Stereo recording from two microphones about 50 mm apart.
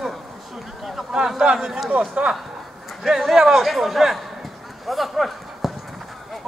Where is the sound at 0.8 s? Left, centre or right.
Centre.